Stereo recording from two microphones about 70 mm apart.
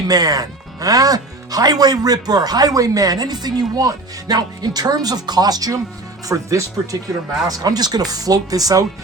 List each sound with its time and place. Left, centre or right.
0.1 s speech: right
7.4 s speech: right